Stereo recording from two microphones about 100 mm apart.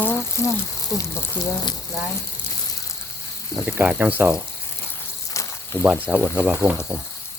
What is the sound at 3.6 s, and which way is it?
Speech, 20° right (ahead or behind).